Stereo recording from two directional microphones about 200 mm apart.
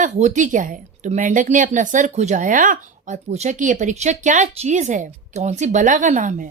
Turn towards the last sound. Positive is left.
turn(degrees=-40)  # may be behind; listen again after turning